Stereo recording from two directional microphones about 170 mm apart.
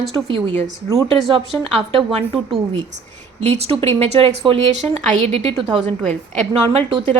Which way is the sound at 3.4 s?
40° right (ahead or behind).